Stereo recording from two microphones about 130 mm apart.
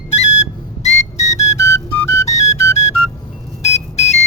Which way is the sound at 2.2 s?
60° left (ahead or behind).